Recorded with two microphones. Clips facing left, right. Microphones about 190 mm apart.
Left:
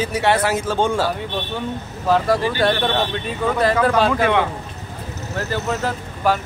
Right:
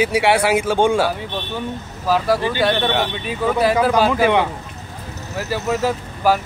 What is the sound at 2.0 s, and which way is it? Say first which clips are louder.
Speech: even; 5° right (ahead or behind).